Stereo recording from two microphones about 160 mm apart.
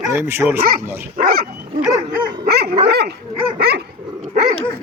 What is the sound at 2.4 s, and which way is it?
Dog, 80° right.